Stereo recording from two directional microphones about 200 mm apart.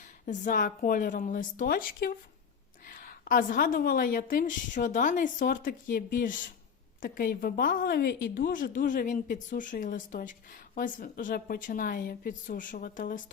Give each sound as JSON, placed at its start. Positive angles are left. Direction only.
{"t": 0.0, "sound": "a woman's voice", "side_deg": 40}